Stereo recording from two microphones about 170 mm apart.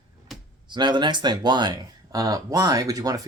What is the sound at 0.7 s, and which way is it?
Speech, 25° right (ahead or behind).